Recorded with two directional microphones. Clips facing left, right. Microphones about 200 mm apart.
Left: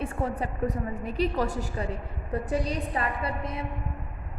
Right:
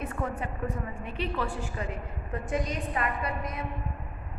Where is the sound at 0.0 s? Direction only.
30° left (ahead or behind).